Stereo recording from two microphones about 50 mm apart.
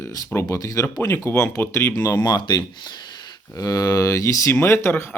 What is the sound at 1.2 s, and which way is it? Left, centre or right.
Speech, left.